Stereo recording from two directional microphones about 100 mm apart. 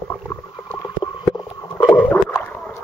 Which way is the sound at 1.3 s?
30° left (ahead or behind).